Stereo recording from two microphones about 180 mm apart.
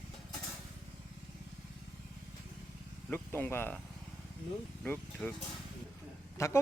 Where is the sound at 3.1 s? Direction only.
10° left (ahead or behind).